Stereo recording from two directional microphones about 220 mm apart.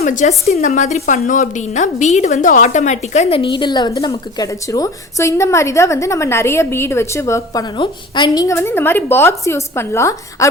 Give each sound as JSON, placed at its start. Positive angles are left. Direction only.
{"t": 0.0, "sound": "a woman's voice", "side_deg": 35}